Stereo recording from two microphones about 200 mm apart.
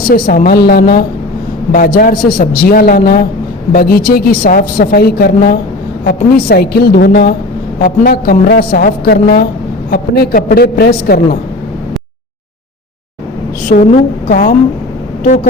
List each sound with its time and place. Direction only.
0.1 s a woman's voice: 45° left (ahead or behind)
13.7 s a woman's voice: 45° left (ahead or behind)